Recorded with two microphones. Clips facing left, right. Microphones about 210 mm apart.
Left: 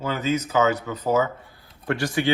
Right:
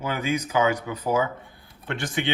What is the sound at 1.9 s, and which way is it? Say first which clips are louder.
Speech: left 5 dB; 25° right (ahead or behind).